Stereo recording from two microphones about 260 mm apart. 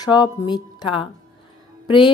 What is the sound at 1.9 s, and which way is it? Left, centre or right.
Music, centre.